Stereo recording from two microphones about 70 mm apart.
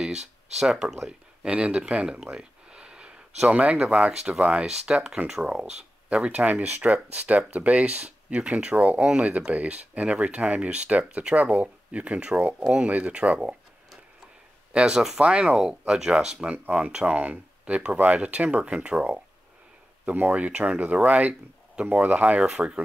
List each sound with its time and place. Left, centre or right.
0.6 s speech: centre
14.7 s speech: centre
22.4 s speech: centre